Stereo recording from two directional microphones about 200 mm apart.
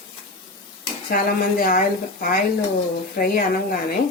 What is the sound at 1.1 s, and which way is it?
Speech, 45° left (ahead or behind).